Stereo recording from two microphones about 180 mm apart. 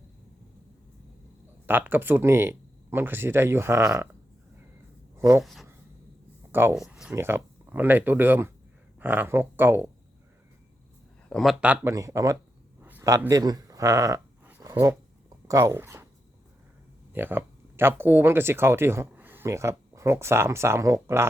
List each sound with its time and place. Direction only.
1.6 s speech: 10° right (ahead or behind)
5.1 s speech: 15° right (ahead or behind)
5.4 s speech: centre (ahead or behind)
6.5 s speech: 15° right (ahead or behind)
6.7 s speech: 5° right (ahead or behind)
7.1 s speech: 15° right (ahead or behind)
11.3 s speech: centre (ahead or behind); by 12.4 s 20° right (ahead or behind)
12.8 s a sound: 15° right (ahead or behind)
15.4 s speech: 15° right (ahead or behind)
17.1 s speech: 10° right (ahead or behind)